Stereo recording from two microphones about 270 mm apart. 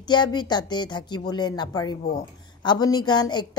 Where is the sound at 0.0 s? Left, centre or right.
Centre.